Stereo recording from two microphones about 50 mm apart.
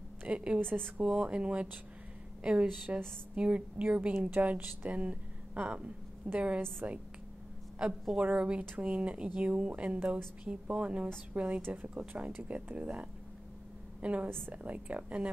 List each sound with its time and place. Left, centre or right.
0.3 s speech: right
0.6 s a woman's voice: right
1.0 s speech: right
8.2 s speech: right
9.9 s a woman's voice: right
10.4 s speech: right